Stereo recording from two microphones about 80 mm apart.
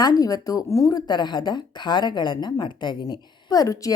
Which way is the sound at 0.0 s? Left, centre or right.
Left.